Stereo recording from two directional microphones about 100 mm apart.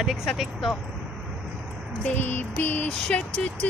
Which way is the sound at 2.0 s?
20° left (ahead or behind).